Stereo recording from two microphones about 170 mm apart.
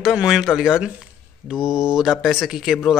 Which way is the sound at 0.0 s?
5° right (ahead or behind).